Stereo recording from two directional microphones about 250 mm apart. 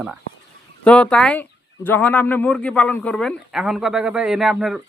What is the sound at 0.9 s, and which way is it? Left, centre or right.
A man's voice, centre.